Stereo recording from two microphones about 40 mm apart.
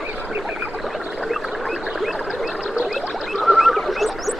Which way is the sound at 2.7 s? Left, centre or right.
Centre.